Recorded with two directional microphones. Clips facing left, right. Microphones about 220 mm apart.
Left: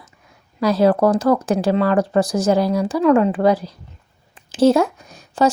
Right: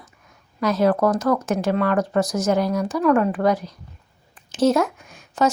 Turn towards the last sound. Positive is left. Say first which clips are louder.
# left 3 dB
turn(degrees=35)  # may be behind; listen again after turning